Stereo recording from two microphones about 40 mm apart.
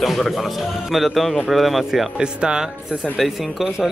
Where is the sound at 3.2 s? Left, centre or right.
Centre.